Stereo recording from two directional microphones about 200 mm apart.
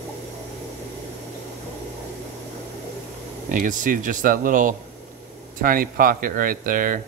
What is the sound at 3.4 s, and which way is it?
Speech, 40° right (ahead or behind).